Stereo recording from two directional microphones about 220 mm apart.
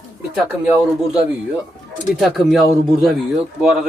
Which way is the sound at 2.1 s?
Centre (ahead or behind).